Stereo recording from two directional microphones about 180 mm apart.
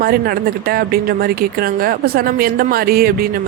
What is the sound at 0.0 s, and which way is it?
Speech, 55° right (ahead or behind).